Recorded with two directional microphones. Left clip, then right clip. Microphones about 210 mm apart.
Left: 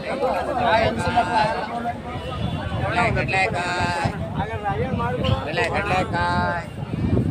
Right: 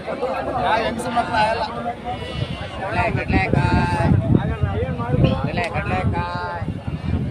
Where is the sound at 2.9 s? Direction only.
35° left (ahead or behind).